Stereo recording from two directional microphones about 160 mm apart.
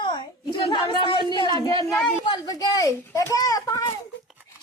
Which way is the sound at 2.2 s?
25° left (ahead or behind).